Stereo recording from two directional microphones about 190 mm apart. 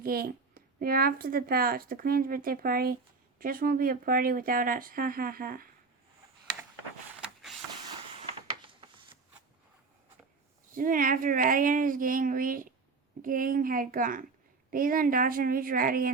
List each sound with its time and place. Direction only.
0.0 s a child's voice: 50° right (ahead or behind)
8.4 s a sound: 25° right (ahead or behind)
10.8 s a child's voice: 45° right (ahead or behind)